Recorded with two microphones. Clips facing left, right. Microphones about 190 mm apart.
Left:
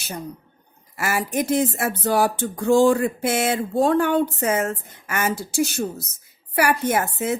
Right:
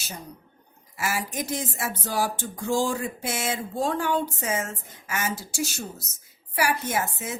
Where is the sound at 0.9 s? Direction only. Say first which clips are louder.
Left 6 dB; 60° left (ahead or behind).